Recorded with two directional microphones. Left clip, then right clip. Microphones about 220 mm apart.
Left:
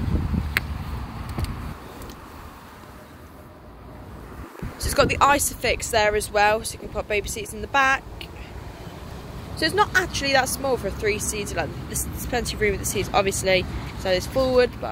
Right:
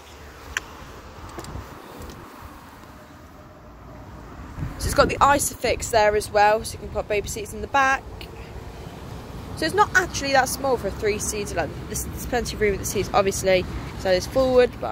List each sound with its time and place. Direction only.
4.8 s speech: centre (ahead or behind)
9.6 s speech: centre (ahead or behind)